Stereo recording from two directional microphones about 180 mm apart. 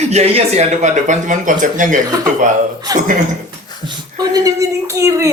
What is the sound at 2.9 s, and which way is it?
Speech, 20° right (ahead or behind).